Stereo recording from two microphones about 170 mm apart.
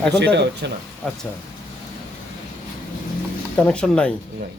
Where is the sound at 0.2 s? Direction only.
85° right.